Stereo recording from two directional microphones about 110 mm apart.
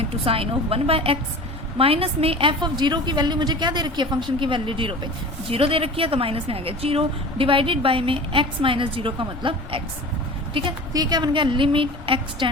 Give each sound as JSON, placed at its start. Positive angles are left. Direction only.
{"t": 0.3, "sound": "a woman's voice", "side_deg": -60}
{"t": 10.9, "sound": "a woman's voice", "side_deg": -35}